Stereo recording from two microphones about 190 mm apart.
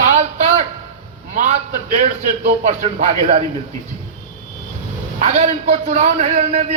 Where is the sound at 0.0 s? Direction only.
40° right (ahead or behind).